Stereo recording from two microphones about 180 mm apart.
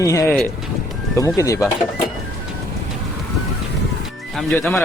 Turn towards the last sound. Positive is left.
turn(degrees=5)  # may be behind; listen again after turning